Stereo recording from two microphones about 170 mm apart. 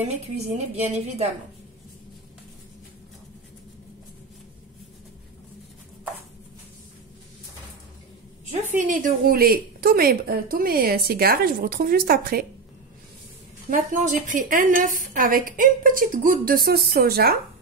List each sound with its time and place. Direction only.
0.0 s a woman's voice: 40° right (ahead or behind)
8.7 s a woman's voice: 50° right (ahead or behind)
13.7 s a woman's voice: 50° right (ahead or behind)